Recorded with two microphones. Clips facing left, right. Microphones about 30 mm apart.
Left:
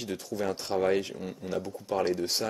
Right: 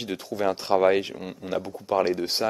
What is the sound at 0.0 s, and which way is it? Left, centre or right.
Speech, right.